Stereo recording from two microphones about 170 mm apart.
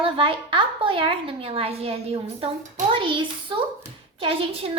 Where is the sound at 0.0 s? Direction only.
30° right (ahead or behind).